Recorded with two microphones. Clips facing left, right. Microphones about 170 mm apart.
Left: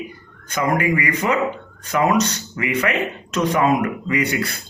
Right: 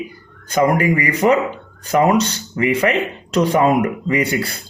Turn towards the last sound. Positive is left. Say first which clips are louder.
# right 3 dB
turn(degrees=-30)  # may be behind; listen again after turning